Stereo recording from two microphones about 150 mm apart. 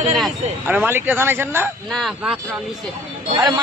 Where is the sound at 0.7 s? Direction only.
10° right (ahead or behind).